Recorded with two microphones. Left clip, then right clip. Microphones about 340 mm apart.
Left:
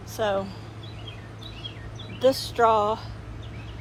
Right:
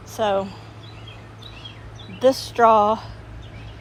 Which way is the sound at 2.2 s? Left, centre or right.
Centre.